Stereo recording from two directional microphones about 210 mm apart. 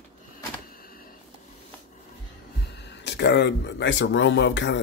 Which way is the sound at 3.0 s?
55° left (ahead or behind).